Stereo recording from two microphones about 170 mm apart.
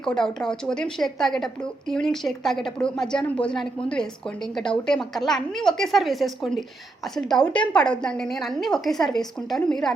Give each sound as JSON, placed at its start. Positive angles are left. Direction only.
{"t": 0.0, "sound": "a woman's voice", "side_deg": 5}
{"t": 4.9, "sound": "a woman's voice", "side_deg": 0}